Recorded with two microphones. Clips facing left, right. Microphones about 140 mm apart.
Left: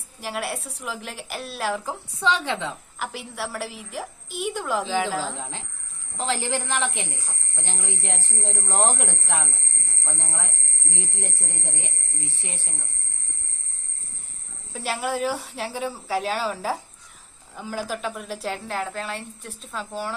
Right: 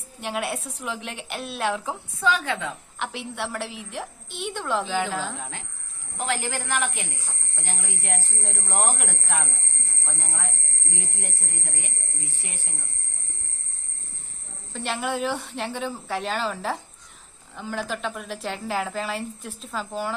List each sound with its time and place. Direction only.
0.2 s a woman's voice: centre (ahead or behind)
2.2 s speech: 25° left (ahead or behind)
3.0 s a woman's voice: 5° left (ahead or behind)
5.4 s speech: 30° left (ahead or behind)
14.7 s a woman's voice: 5° left (ahead or behind)